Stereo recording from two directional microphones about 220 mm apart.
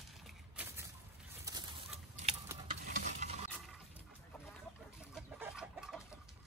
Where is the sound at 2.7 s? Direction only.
30° right (ahead or behind).